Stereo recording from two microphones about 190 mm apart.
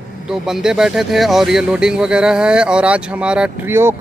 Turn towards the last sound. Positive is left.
turn(degrees=-15)  # may be behind; listen again after turning